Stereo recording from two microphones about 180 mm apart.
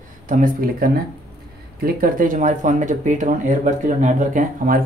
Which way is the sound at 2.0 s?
50° right (ahead or behind).